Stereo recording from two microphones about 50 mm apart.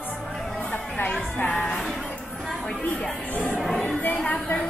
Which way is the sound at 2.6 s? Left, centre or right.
Left.